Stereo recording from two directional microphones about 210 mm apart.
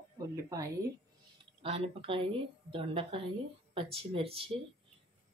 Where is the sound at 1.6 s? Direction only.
30° right (ahead or behind).